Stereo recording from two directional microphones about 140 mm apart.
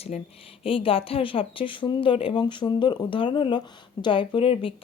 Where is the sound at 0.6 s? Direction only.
40° left (ahead or behind).